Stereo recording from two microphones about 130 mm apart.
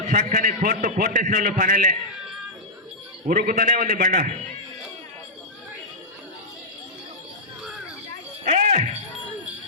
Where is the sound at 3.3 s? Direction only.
90° right.